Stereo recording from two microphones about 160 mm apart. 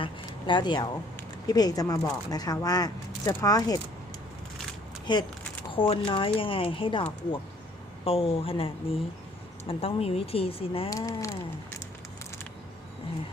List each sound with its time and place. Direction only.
0.0 s speech: 30° left (ahead or behind)
5.1 s speech: 30° left (ahead or behind)
8.0 s speech: 35° left (ahead or behind)
10.8 s speech: 20° left (ahead or behind)